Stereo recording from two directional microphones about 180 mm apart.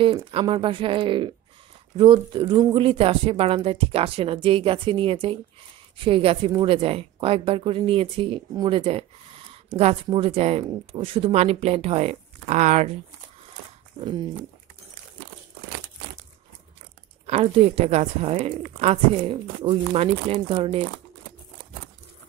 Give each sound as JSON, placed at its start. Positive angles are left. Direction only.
{"t": 0.0, "sound": "a woman's voice", "side_deg": -30}
{"t": 14.0, "sound": "speech", "side_deg": -35}
{"t": 17.3, "sound": "a woman's voice", "side_deg": -35}